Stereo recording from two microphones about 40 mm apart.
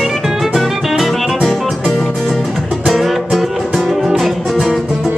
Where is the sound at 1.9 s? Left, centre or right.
Centre.